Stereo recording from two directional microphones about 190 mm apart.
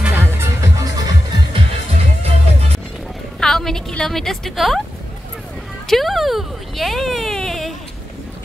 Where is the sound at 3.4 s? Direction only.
5° left (ahead or behind).